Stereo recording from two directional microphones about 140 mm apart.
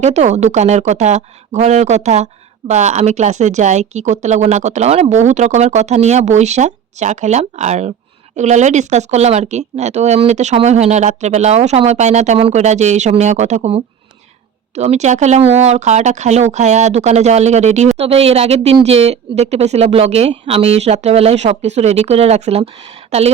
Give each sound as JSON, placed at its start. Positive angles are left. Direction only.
{"t": 0.0, "sound": "speech", "side_deg": -55}